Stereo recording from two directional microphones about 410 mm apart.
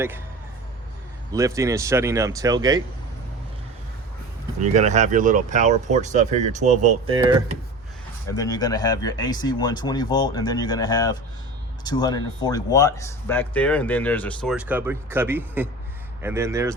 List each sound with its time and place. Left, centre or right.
1.3 s speech: centre
4.6 s speech: centre
8.4 s speech: centre